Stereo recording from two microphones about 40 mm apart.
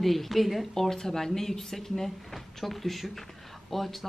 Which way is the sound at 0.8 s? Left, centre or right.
Centre.